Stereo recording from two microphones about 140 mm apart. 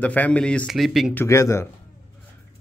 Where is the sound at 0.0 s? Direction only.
10° left (ahead or behind).